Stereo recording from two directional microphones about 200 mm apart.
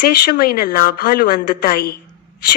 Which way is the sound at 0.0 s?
50° left (ahead or behind).